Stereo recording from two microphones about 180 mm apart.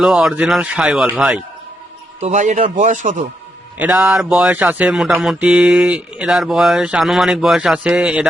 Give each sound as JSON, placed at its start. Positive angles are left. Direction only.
{"t": 0.0, "sound": "speech", "side_deg": -5}
{"t": 2.2, "sound": "a man's voice", "side_deg": -40}
{"t": 3.8, "sound": "speech", "side_deg": -5}